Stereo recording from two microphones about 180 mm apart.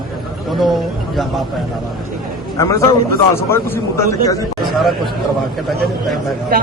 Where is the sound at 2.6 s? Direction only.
15° left (ahead or behind).